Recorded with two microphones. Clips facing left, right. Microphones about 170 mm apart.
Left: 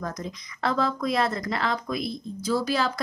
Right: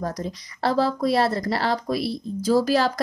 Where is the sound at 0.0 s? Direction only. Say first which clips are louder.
Right 4 dB; 35° right (ahead or behind).